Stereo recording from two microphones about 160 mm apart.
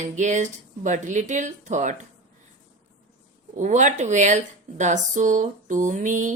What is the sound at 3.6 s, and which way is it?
Speech, 50° right (ahead or behind).